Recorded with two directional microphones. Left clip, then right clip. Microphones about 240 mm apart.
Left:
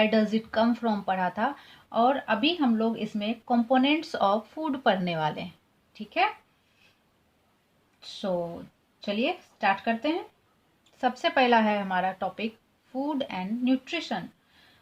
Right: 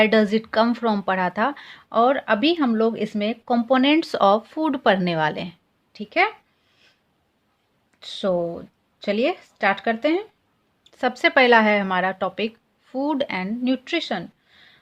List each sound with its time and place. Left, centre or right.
0.0 s a woman's voice: right
7.9 s speech: right